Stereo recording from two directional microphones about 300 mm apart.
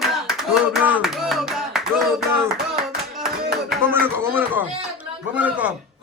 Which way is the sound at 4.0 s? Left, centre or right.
Centre.